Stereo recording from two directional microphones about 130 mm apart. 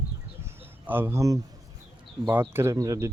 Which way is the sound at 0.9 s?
15° right (ahead or behind).